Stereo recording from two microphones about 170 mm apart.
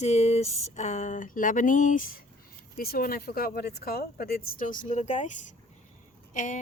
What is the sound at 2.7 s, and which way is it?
Speech, 60° left (ahead or behind).